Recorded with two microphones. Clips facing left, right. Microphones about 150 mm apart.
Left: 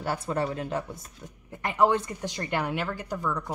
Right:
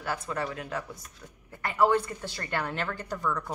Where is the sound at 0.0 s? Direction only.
30° left (ahead or behind).